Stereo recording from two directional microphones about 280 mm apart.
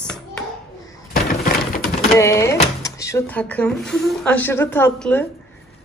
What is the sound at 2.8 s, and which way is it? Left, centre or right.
A woman's voice, centre.